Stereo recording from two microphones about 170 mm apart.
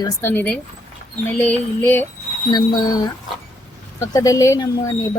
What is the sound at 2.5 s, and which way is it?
A woman's voice, 25° left (ahead or behind).